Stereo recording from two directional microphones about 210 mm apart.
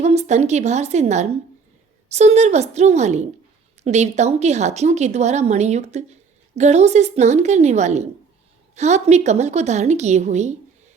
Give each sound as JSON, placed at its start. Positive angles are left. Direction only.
{"t": 0.0, "sound": "a woman's voice", "side_deg": -30}